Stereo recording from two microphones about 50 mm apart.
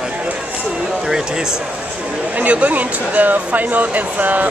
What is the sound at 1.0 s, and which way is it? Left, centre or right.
Speech, centre.